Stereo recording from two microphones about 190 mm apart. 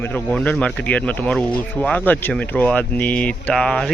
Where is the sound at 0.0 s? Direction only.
5° left (ahead or behind).